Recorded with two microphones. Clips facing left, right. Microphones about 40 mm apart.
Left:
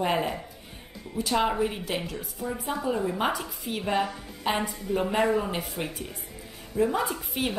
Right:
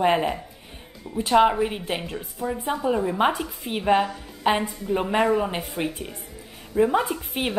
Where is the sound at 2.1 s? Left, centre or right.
Centre.